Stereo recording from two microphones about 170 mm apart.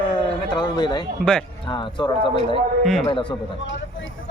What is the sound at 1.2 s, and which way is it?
Speech, centre (ahead or behind).